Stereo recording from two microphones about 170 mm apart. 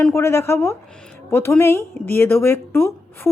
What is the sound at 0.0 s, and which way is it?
A woman's voice, 15° left (ahead or behind).